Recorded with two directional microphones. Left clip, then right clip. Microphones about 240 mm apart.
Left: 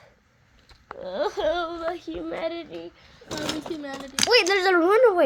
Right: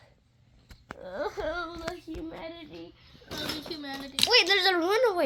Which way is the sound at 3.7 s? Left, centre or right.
Centre.